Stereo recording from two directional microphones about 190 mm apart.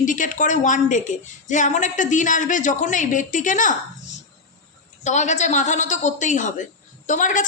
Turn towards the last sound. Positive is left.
turn(degrees=40)  # may be behind; listen again after turning